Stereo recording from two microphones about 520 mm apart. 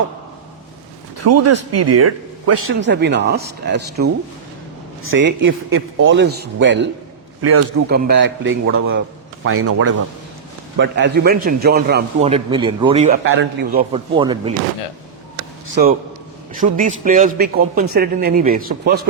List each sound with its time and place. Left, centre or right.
1.2 s a man's voice: right
7.9 s a man's voice: centre
13.9 s a man's voice: centre
15.7 s a man's voice: centre